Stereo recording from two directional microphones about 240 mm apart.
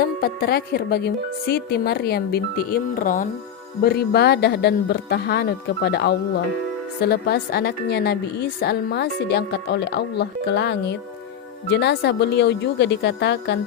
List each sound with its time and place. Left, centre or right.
0.0 s a woman's voice: left